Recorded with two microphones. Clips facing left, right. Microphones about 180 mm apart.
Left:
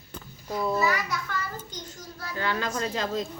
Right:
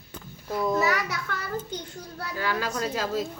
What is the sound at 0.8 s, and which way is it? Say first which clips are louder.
A child's voice: right 1 dB; 60° right (ahead or behind).